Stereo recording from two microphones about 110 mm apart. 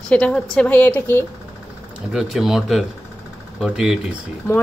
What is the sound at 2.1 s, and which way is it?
A woman's voice, centre (ahead or behind).